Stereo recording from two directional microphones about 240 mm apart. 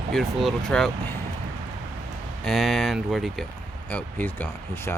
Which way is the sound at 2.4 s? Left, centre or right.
Centre.